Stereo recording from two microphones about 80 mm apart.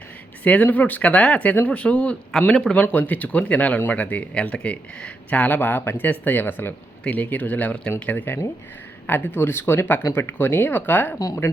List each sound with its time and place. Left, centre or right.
0.4 s speech: centre
2.8 s speech: left